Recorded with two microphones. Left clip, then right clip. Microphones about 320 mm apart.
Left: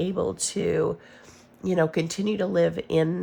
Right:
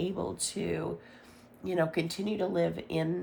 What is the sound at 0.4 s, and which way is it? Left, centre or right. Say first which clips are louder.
Speech: left 11 dB; left.